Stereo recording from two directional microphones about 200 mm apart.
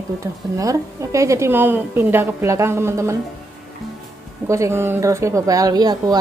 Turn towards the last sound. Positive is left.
turn(degrees=-20)  # may be behind; listen again after turning